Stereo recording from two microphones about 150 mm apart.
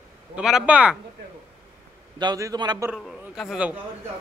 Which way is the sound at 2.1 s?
25° right (ahead or behind).